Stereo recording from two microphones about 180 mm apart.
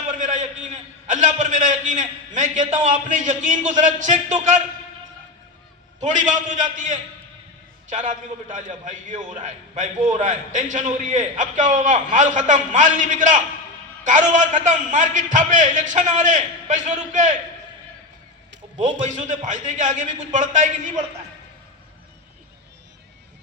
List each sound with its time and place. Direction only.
0.1 s a man's voice: 45° right (ahead or behind)
6.0 s a man's voice: 45° right (ahead or behind)
18.8 s a man's voice: 45° right (ahead or behind)